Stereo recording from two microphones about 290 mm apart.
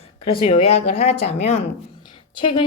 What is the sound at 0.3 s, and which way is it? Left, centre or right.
Speech, centre.